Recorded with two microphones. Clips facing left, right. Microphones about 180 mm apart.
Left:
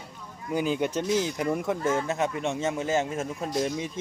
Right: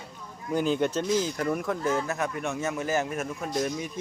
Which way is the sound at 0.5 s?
10° left (ahead or behind).